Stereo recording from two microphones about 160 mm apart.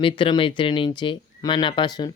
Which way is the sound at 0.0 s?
30° left (ahead or behind).